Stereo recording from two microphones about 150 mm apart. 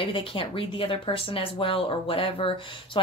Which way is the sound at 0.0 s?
35° left (ahead or behind).